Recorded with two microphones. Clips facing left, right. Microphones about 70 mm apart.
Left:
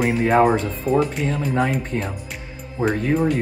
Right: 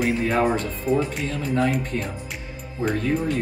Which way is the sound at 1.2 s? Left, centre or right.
Left.